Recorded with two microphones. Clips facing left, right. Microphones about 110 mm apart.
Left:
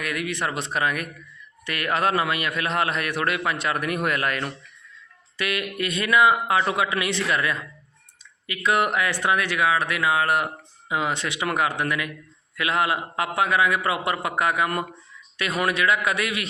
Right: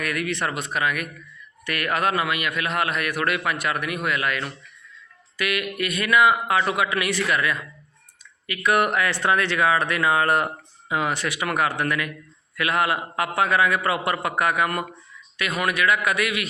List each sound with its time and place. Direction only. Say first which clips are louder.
0.0 s a man's voice: right 1 dB; 20° left (ahead or behind)
0.5 s a man's voice: even; 30° left (ahead or behind)
5.4 s a man's voice: right 1 dB; 30° left (ahead or behind); by 10.5 s 5° left (ahead or behind)
10.8 s a man's voice: right 1 dB; 20° left (ahead or behind)